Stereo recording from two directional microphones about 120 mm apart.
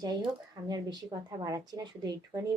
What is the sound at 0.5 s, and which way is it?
Speech, 35° right (ahead or behind).